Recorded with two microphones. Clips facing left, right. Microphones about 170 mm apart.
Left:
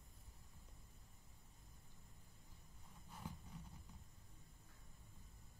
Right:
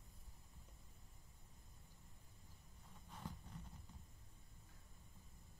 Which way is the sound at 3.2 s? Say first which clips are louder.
Even; 10° left (ahead or behind).